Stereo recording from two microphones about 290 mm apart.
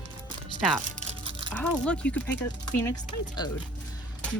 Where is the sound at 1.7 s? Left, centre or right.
Centre.